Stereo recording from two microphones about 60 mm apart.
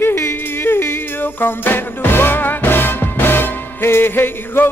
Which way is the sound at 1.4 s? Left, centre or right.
Left.